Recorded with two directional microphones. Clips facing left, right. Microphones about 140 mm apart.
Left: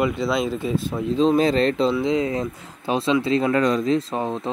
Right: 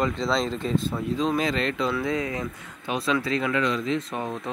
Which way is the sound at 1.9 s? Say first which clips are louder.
Left 6 dB; 20° left (ahead or behind).